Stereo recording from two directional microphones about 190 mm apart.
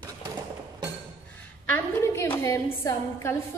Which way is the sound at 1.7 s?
10° left (ahead or behind).